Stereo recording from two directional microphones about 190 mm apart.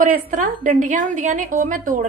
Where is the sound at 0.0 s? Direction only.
45° right (ahead or behind).